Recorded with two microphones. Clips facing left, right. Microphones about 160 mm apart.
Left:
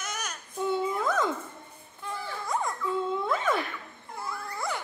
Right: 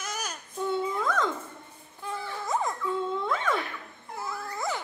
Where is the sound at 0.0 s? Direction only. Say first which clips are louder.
Right 1 dB; 30° right (ahead or behind).